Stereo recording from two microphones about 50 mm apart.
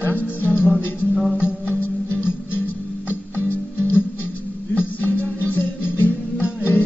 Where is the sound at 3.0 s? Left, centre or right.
Right.